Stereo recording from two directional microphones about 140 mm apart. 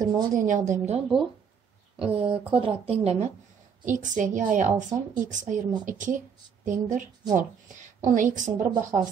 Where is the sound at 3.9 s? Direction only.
65° right (ahead or behind).